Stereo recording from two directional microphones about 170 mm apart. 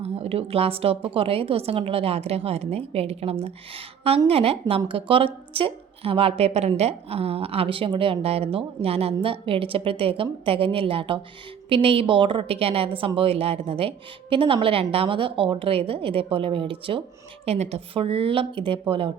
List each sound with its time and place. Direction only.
0.0 s a woman's voice: 35° right (ahead or behind)